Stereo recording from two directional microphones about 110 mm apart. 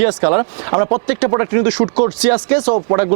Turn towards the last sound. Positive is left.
turn(degrees=-20)  # may be behind; listen again after turning